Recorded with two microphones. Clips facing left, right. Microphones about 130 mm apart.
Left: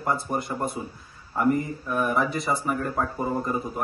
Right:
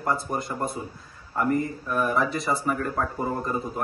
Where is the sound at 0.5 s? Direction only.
5° left (ahead or behind).